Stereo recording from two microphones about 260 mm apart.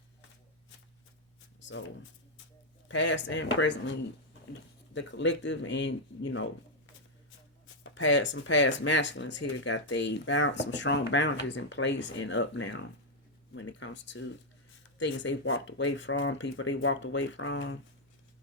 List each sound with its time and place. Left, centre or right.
1.6 s speech: left
2.9 s speech: left
4.9 s speech: left
7.9 s speech: left